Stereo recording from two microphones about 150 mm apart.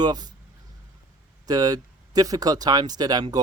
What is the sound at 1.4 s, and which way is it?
Speech, 25° right (ahead or behind).